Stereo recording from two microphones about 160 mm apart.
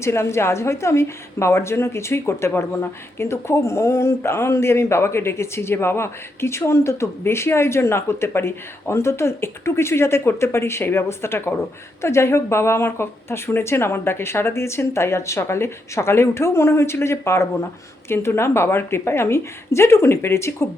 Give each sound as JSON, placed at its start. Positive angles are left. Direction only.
{"t": 0.0, "sound": "a woman's voice", "side_deg": 15}